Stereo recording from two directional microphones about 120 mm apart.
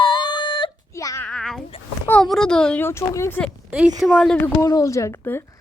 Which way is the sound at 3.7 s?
10° right (ahead or behind).